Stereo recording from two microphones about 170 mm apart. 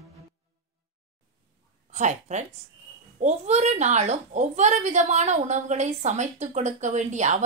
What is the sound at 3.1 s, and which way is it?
A woman's voice, 40° right (ahead or behind).